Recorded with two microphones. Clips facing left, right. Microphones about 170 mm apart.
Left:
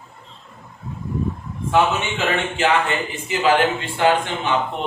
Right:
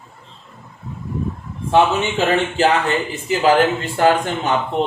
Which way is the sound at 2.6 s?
40° right (ahead or behind).